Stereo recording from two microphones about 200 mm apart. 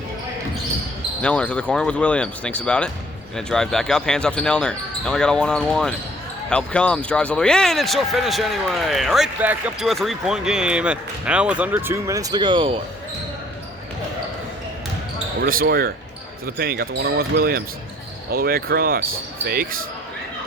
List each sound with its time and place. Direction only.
1.2 s speech: 5° left (ahead or behind); by 12.8 s 25° right (ahead or behind)
15.4 s speech: 50° right (ahead or behind)